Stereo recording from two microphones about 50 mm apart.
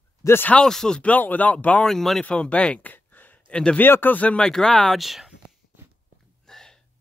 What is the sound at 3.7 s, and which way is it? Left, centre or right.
Speech, left.